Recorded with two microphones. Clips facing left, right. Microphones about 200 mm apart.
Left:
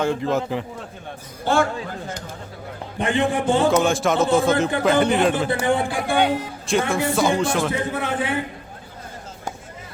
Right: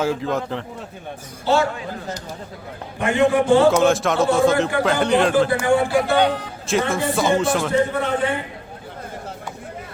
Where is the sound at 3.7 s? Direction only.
Centre (ahead or behind).